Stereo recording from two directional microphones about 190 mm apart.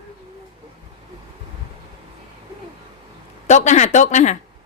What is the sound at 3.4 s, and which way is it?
Speech, 40° left (ahead or behind).